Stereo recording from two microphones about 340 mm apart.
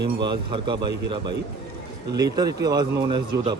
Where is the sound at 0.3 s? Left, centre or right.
Centre.